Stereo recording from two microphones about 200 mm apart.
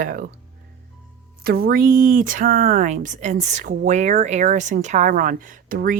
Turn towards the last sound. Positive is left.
turn(degrees=-45)  # may be behind; listen again after turning